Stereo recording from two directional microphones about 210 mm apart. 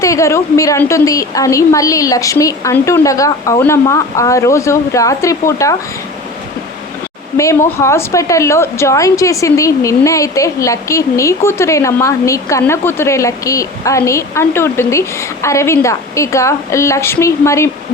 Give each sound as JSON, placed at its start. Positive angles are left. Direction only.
{"t": 0.0, "sound": "a woman's voice", "side_deg": 15}
{"t": 7.3, "sound": "a woman's voice", "side_deg": 15}